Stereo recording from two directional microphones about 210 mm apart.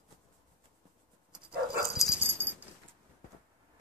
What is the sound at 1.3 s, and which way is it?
Dog, 5° right (ahead or behind).